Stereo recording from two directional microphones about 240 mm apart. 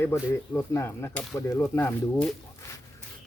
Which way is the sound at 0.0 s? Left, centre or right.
Centre.